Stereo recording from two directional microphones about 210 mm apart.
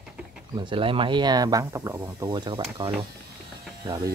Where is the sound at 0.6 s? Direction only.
25° right (ahead or behind).